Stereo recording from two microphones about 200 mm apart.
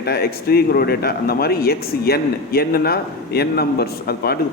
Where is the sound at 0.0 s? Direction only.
50° left (ahead or behind).